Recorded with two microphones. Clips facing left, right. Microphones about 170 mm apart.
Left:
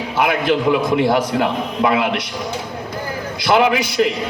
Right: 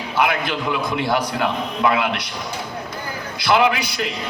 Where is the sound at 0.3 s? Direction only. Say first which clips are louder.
Left 7 dB; 30° left (ahead or behind).